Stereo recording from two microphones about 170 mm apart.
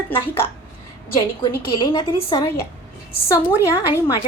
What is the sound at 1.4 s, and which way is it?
A woman's voice, 30° left (ahead or behind).